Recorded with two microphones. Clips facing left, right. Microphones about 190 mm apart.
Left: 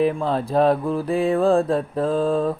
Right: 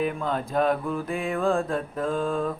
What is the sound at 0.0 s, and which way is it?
Mantra, 30° left (ahead or behind).